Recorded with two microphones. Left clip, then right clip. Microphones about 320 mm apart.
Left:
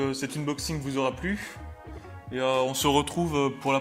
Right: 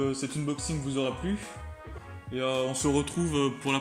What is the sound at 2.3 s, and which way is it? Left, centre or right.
Music, left.